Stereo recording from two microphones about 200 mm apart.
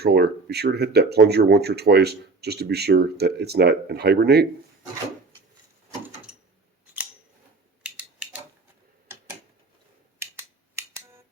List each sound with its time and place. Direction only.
0.0 s speech: 55° right (ahead or behind)
7.9 s a sound: 5° right (ahead or behind)
10.2 s finger snapping: 15° right (ahead or behind)